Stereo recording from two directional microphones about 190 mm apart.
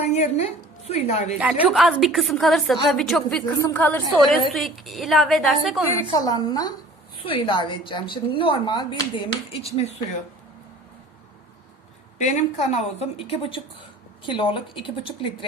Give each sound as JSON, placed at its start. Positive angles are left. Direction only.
{"t": 0.1, "sound": "a woman's voice", "side_deg": 35}
{"t": 1.4, "sound": "a woman's voice", "side_deg": -5}
{"t": 5.9, "sound": "speech", "side_deg": 20}
{"t": 12.2, "sound": "a woman's voice", "side_deg": 40}